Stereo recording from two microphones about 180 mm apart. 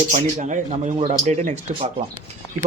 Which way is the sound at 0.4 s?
45° right (ahead or behind).